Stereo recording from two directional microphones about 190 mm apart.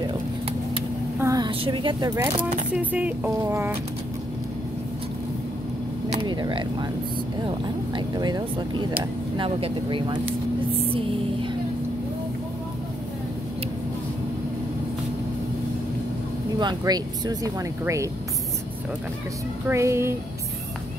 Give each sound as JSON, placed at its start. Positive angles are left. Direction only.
{"t": 0.0, "sound": "vehicle", "side_deg": -30}
{"t": 1.2, "sound": "speech", "side_deg": -20}
{"t": 6.1, "sound": "a sound", "side_deg": -25}
{"t": 7.4, "sound": "speech", "side_deg": -25}
{"t": 16.5, "sound": "speech", "side_deg": -20}
{"t": 19.7, "sound": "speech", "side_deg": -15}